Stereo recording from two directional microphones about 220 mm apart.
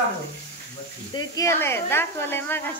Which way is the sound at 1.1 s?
15° left (ahead or behind).